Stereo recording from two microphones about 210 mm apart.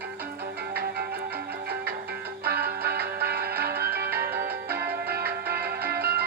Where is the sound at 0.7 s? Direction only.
50° right (ahead or behind).